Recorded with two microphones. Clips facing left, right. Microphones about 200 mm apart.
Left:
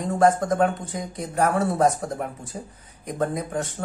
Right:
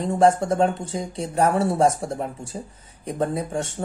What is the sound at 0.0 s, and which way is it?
Speech, 30° right (ahead or behind).